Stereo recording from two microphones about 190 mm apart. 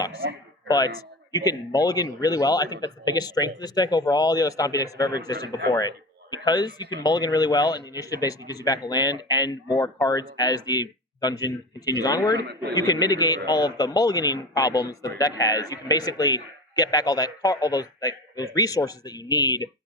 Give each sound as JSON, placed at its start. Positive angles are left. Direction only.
{"t": 0.7, "sound": "a man's voice", "side_deg": 20}